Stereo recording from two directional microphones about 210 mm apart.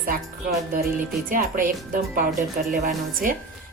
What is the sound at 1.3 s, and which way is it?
Speech, 40° right (ahead or behind).